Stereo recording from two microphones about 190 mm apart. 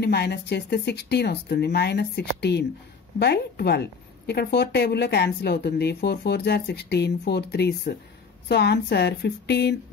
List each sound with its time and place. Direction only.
0.0 s a woman's voice: 60° left (ahead or behind)